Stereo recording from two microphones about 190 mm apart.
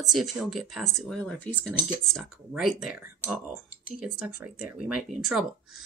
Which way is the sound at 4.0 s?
5° right (ahead or behind).